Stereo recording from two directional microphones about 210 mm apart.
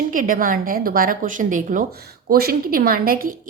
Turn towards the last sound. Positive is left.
turn(degrees=-45)  # may be behind; listen again after turning